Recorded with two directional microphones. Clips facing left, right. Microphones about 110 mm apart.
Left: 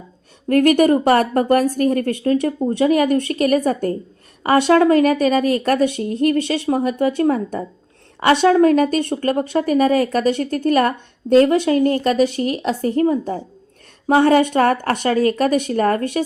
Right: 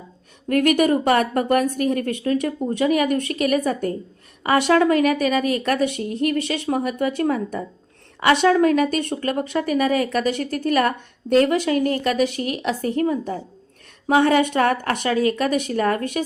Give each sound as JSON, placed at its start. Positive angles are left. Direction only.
{"t": 0.4, "sound": "a woman's voice", "side_deg": 35}